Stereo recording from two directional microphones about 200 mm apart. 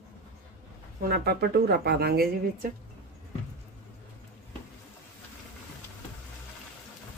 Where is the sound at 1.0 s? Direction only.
50° right (ahead or behind).